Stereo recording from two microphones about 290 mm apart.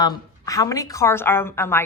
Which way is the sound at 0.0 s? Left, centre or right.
Centre.